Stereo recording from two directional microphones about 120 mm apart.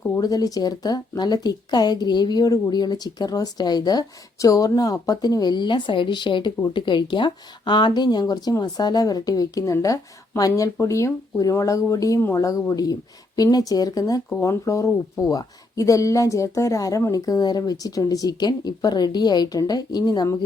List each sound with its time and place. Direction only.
0.2 s speech: 30° left (ahead or behind)